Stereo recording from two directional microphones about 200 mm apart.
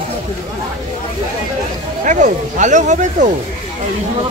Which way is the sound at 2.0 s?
40° right (ahead or behind).